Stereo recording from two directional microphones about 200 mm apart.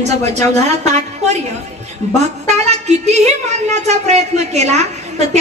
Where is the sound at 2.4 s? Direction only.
35° right (ahead or behind).